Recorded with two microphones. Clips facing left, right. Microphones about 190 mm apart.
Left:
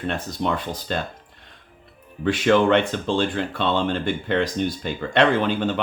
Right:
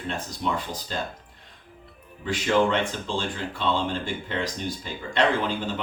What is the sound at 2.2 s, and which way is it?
Speech, 65° left (ahead or behind).